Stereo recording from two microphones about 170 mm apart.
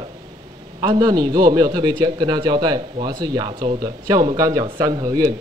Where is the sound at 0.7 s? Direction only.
25° right (ahead or behind).